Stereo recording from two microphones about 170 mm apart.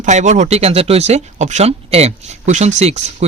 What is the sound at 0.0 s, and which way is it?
Speech, 45° right (ahead or behind).